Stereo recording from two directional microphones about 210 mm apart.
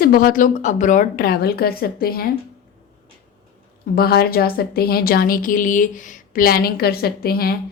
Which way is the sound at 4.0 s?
45° left (ahead or behind).